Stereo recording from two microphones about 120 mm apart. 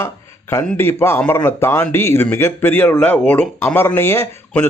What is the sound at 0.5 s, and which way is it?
Speech, 20° left (ahead or behind).